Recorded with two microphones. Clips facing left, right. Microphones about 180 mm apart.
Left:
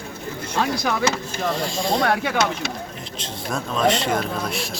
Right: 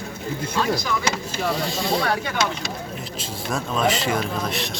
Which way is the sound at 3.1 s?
5° right (ahead or behind).